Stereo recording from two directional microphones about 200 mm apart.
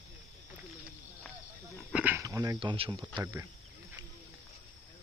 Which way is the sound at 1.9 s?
10° right (ahead or behind).